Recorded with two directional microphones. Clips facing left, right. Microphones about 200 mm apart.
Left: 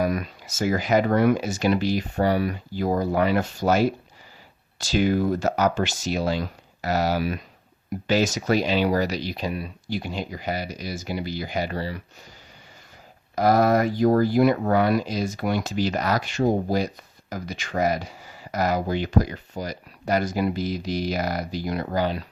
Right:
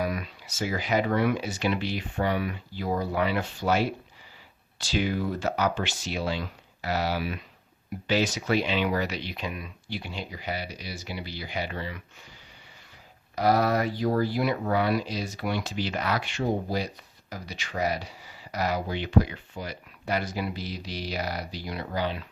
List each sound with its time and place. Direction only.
0.0 s speech: 45° left (ahead or behind)
13.3 s speech: 45° left (ahead or behind)